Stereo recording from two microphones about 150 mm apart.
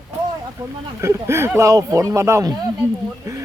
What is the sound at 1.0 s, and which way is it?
Speech, 20° right (ahead or behind).